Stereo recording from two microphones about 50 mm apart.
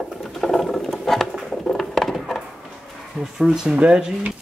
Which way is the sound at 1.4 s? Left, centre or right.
Centre.